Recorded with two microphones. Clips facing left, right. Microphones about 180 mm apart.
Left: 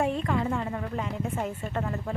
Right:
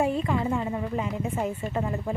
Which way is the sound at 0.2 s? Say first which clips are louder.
Right 2 dB; 5° right (ahead or behind).